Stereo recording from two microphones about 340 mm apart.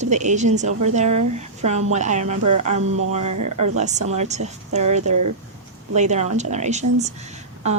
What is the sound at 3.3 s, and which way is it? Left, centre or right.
Speech, right.